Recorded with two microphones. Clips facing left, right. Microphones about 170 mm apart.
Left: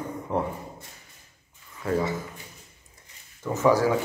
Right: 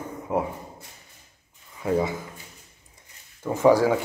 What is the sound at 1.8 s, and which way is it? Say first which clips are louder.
Speech: right 2 dB; 15° right (ahead or behind).